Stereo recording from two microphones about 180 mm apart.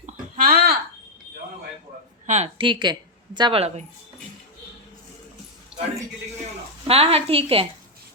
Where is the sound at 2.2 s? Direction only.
40° right (ahead or behind).